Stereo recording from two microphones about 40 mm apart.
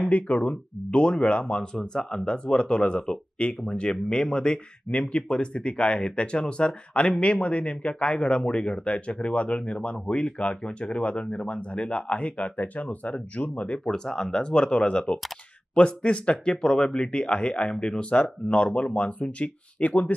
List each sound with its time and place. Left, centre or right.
0.0 s speech: left
13.8 s speech: centre
14.4 s speech: left